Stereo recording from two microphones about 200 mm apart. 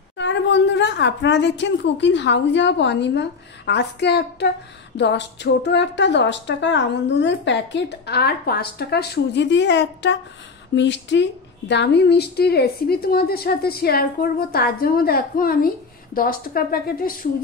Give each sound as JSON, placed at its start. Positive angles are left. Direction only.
{"t": 0.2, "sound": "a woman's voice", "side_deg": 60}